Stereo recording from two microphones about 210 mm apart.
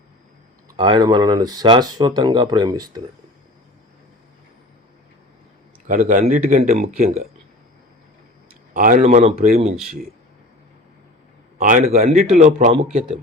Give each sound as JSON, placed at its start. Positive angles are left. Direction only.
{"t": 0.8, "sound": "speech", "side_deg": -20}
{"t": 5.9, "sound": "a man's voice", "side_deg": -35}
{"t": 8.7, "sound": "a man's voice", "side_deg": -40}
{"t": 11.5, "sound": "a man's voice", "side_deg": -35}